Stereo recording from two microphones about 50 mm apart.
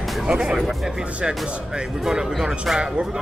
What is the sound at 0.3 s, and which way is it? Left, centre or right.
Speech, centre.